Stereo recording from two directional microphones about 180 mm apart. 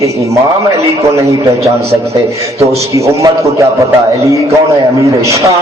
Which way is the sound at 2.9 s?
15° right (ahead or behind).